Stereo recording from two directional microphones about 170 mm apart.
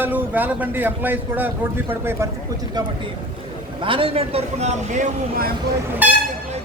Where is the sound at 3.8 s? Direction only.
30° right (ahead or behind).